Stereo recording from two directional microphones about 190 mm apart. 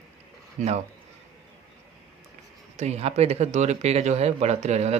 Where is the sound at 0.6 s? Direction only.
40° right (ahead or behind).